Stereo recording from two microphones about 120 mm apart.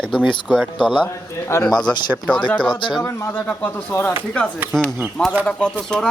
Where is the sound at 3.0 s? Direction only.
20° left (ahead or behind).